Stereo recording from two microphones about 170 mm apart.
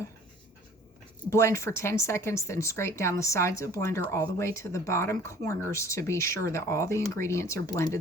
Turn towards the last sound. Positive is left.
turn(degrees=15)  # may be behind; listen again after turning